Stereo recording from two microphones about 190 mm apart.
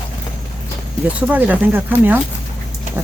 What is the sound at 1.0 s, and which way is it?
Speech, 10° right (ahead or behind).